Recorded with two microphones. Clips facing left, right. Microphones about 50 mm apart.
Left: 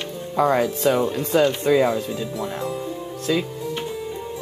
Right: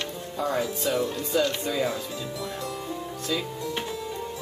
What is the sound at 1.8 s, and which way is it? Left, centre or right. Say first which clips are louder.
Speech: left 7 dB; left.